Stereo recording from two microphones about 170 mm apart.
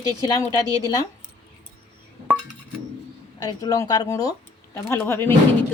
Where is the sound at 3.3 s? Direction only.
20° left (ahead or behind).